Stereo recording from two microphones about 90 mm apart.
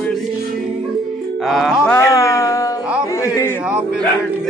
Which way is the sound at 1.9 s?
30° left (ahead or behind).